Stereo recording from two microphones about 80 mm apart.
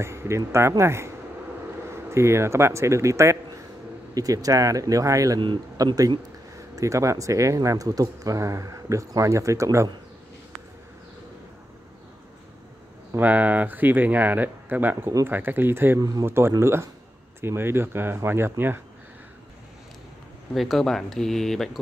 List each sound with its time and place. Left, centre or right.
0.0 s speech: right
13.1 s speech: right
16.0 s speech: right
16.3 s speech: right
20.5 s speech: centre